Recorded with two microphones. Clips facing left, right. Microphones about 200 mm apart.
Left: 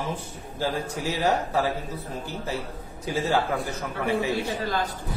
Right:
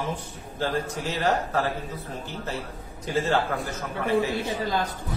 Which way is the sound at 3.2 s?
10° left (ahead or behind).